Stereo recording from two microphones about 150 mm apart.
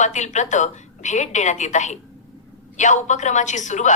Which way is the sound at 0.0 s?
50° left (ahead or behind).